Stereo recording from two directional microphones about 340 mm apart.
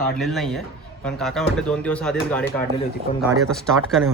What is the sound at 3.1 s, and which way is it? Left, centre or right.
Speech, centre.